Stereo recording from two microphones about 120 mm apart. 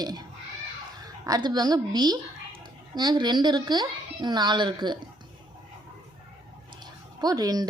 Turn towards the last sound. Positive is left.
turn(degrees=-30)  # may be behind; listen again after turning